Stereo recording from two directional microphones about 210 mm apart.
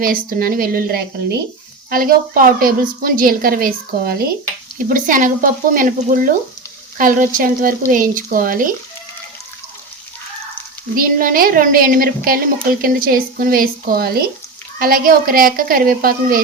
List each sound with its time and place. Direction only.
0.0 s a woman's voice: 45° right (ahead or behind)
10.9 s a woman's voice: 40° right (ahead or behind)